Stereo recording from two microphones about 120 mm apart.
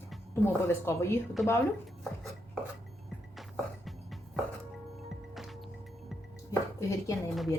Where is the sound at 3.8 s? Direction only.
Centre (ahead or behind).